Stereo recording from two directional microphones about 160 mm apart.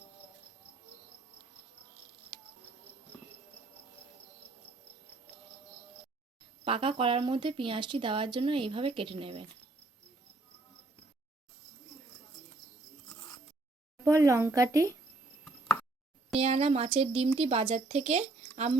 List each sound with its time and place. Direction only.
6.7 s a woman's voice: 35° right (ahead or behind)
14.0 s speech: 20° right (ahead or behind)
16.3 s a woman's voice: 40° right (ahead or behind)